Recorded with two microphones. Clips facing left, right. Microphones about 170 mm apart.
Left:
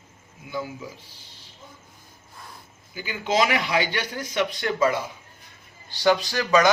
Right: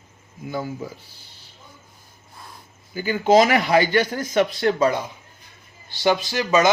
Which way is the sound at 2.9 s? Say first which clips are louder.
Right 8 dB; 45° right (ahead or behind).